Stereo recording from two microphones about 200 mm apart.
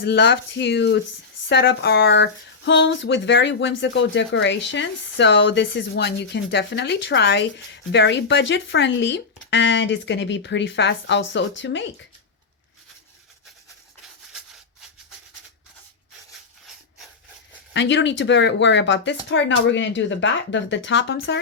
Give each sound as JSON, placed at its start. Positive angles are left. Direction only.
{"t": 0.0, "sound": "speech", "side_deg": 55}
{"t": 17.7, "sound": "speech", "side_deg": 60}